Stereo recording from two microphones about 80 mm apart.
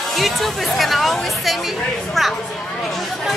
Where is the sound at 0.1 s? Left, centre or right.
Centre.